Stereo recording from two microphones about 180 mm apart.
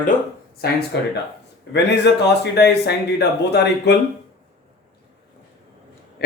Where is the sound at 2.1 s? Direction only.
70° left (ahead or behind).